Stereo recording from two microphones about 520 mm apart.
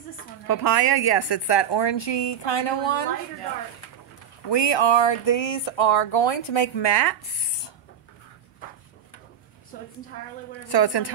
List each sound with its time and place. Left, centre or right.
0.5 s a woman's voice: left
4.5 s speech: left
10.7 s a woman's voice: left